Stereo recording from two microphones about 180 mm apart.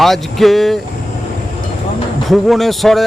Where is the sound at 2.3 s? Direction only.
Centre (ahead or behind).